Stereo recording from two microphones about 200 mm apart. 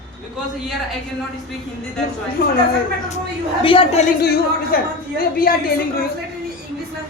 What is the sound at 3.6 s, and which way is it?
Speech, 25° left (ahead or behind).